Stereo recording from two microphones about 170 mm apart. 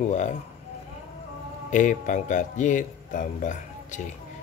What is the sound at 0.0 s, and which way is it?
Speech, 45° left (ahead or behind).